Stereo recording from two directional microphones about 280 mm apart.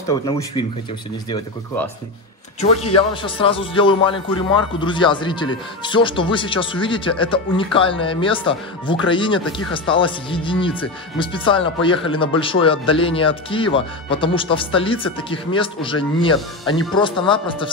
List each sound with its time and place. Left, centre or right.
0.1 s a man's voice: centre
3.0 s a man's voice: centre